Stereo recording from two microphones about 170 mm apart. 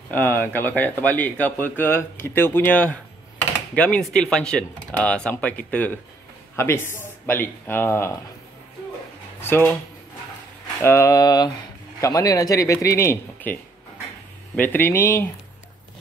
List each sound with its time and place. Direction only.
0.1 s speech: 10° left (ahead or behind)
9.4 s a sound: 15° left (ahead or behind)
10.8 s speech: 15° left (ahead or behind)